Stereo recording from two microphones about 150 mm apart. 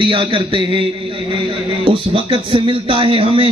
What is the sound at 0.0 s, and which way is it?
A man's voice, 35° right (ahead or behind).